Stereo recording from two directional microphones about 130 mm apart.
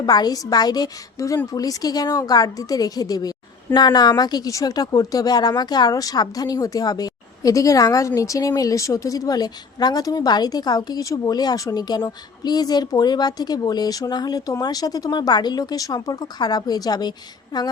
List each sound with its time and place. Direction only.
0.0 s a woman's voice: 30° left (ahead or behind)